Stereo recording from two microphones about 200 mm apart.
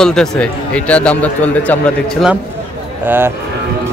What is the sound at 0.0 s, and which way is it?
A man's voice, 5° left (ahead or behind).